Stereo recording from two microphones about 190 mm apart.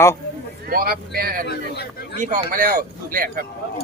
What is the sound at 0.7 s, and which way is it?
Speech, 55° right (ahead or behind).